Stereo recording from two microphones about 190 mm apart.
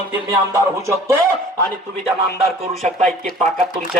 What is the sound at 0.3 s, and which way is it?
Music, 15° right (ahead or behind).